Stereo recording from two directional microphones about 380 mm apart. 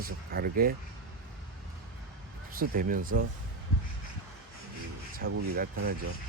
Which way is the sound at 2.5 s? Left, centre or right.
Right.